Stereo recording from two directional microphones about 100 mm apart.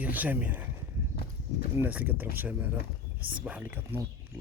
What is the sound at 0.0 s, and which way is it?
Speech, 15° right (ahead or behind).